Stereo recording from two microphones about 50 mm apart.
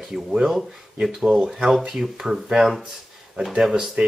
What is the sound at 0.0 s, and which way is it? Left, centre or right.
Speech, centre.